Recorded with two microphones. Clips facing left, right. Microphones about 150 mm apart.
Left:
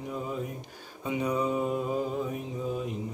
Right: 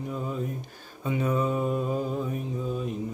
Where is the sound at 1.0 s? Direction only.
15° left (ahead or behind).